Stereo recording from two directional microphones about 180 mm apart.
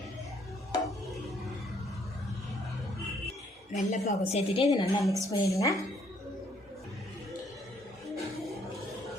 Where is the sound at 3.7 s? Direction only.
35° left (ahead or behind).